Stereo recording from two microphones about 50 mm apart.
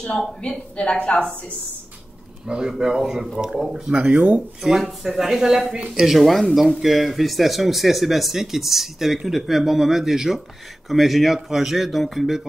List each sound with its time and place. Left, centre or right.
0.4 s a woman's voice: left
2.4 s speech: centre
3.9 s speech: right
4.6 s speech: centre
6.1 s speech: centre